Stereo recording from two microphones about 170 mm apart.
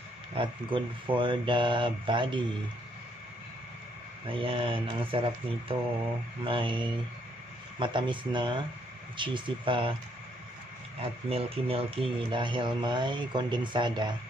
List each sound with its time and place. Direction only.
0.3 s speech: 30° right (ahead or behind)
4.3 s speech: 30° right (ahead or behind)
11.0 s speech: 35° right (ahead or behind)